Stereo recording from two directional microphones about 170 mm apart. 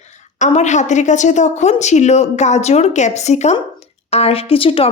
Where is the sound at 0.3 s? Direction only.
45° left (ahead or behind).